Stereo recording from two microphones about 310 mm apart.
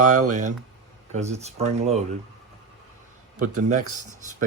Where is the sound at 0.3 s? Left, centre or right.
Right.